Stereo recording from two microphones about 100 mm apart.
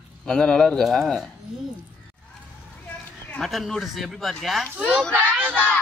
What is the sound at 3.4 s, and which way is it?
Speech, centre (ahead or behind).